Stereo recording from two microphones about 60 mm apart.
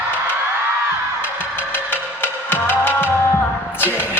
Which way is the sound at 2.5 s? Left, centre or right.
Left.